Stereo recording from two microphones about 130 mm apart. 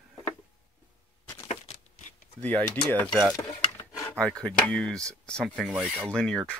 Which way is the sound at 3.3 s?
25° left (ahead or behind).